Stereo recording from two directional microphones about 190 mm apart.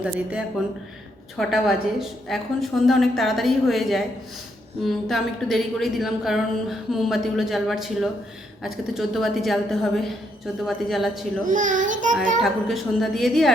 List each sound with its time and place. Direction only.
0.0 s a woman's voice: 5° right (ahead or behind)
11.4 s a child's voice: 40° right (ahead or behind)
12.4 s a woman's voice: centre (ahead or behind)